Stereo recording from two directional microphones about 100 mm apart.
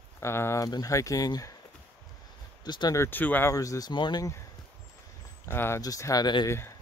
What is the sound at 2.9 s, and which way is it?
Speech, 25° left (ahead or behind).